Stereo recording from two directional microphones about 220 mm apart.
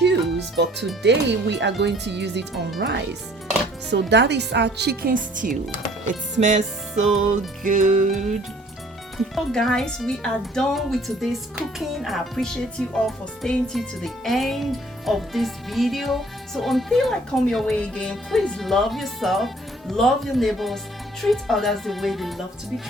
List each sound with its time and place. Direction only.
1.0 s a woman's voice: 50° right (ahead or behind)
4.1 s a woman's voice: 50° right (ahead or behind); by 6.6 s 35° right (ahead or behind)
6.9 s speech: centre (ahead or behind)
7.3 s music: 35° right (ahead or behind)
9.1 s speech: centre (ahead or behind)